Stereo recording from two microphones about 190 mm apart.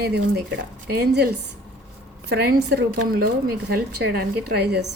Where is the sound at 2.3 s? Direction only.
60° right (ahead or behind).